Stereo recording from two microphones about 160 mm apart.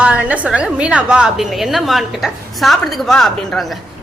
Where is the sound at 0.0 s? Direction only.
10° right (ahead or behind).